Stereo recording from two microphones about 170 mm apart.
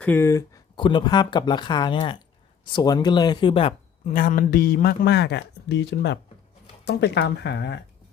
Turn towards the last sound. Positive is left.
turn(degrees=90)